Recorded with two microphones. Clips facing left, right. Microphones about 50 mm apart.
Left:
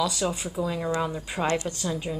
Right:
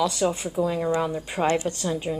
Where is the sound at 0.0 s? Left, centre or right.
Right.